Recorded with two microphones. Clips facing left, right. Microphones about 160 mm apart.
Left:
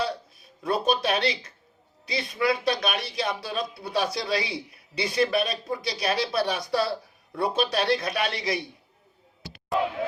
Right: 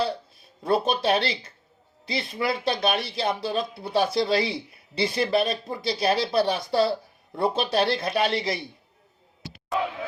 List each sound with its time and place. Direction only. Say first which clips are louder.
0.6 s speech: right 2 dB; 30° right (ahead or behind)